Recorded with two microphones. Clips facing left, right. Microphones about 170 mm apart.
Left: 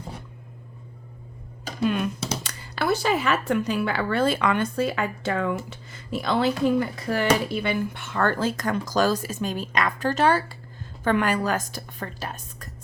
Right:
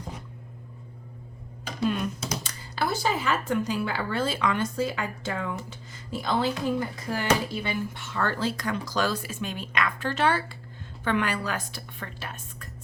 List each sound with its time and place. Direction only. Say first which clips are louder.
2.4 s speech: even; 65° left (ahead or behind); by 12.6 s 40° left (ahead or behind)